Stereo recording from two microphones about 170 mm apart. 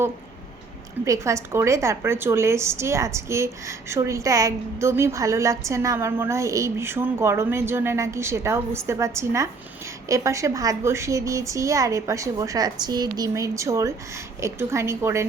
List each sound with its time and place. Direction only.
1.0 s a woman's voice: 20° right (ahead or behind)